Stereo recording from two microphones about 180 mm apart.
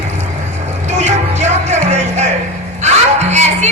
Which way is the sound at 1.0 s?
40° right (ahead or behind).